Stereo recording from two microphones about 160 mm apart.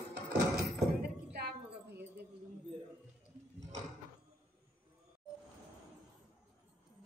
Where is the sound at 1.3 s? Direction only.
90° right.